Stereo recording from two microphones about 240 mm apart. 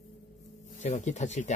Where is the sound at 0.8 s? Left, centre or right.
Left.